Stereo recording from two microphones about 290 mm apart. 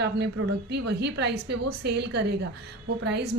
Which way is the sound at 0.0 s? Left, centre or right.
Right.